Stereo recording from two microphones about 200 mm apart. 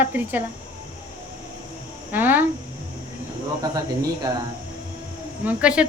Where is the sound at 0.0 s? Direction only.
10° right (ahead or behind).